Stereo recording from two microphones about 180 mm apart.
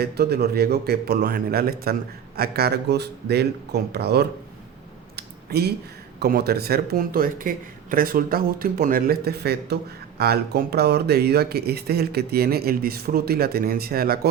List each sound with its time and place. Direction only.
0.0 s a man's voice: 60° right (ahead or behind)
5.1 s a sound: 65° right (ahead or behind)
6.1 s a man's voice: 60° right (ahead or behind)